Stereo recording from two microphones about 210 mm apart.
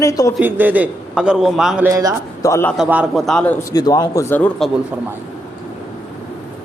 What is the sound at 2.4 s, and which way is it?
Speech, 10° left (ahead or behind).